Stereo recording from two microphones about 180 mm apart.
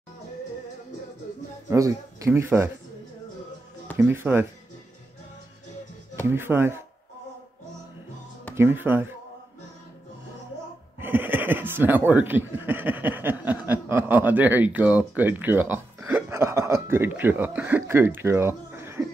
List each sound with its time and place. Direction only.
1.7 s speech: 20° right (ahead or behind)
4.0 s speech: 10° right (ahead or behind)
6.3 s speech: 15° right (ahead or behind)
8.5 s speech: 10° right (ahead or behind)
11.0 s speech: 10° right (ahead or behind)